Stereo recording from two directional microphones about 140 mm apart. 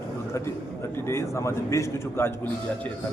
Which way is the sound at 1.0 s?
20° left (ahead or behind).